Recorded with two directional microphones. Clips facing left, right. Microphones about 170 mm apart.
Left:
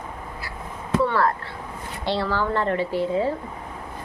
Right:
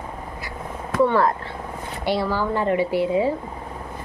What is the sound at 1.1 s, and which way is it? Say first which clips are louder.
Speech: right 3 dB; 15° right (ahead or behind).